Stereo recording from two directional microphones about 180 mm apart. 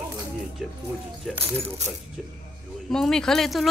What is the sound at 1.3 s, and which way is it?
Speech, centre (ahead or behind).